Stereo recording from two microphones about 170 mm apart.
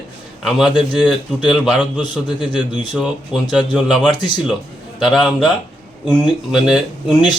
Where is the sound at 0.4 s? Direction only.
5° right (ahead or behind).